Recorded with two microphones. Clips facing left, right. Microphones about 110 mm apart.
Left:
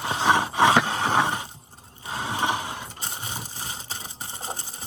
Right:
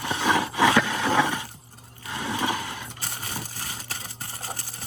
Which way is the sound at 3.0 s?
25° left (ahead or behind).